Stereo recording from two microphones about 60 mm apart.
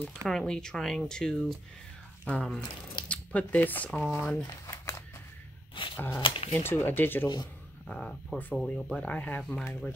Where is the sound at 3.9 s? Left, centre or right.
Centre.